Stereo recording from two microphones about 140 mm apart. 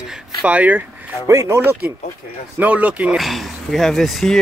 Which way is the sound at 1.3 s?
20° right (ahead or behind).